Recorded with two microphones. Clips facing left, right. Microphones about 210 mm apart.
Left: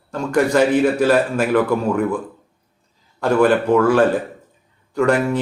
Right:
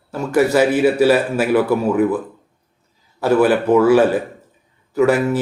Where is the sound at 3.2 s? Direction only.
5° right (ahead or behind).